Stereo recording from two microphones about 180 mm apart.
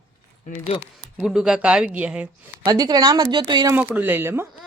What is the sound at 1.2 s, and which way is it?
Speech, centre (ahead or behind).